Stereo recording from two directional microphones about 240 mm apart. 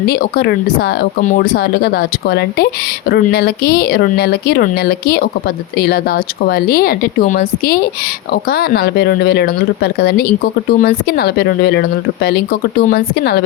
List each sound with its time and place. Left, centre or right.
0.0 s speech: left